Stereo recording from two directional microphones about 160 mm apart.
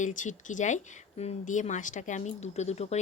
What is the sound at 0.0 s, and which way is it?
A woman's voice, 50° left (ahead or behind).